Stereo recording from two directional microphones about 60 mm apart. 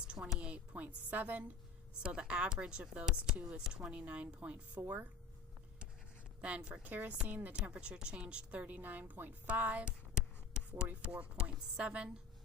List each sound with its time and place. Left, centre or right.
0.3 s a woman's voice: right
4.8 s speech: right
6.4 s a woman's voice: centre
6.8 s speech: right
7.7 s speech: centre; by 9.3 s right
9.5 s a sound: right
11.1 s speech: right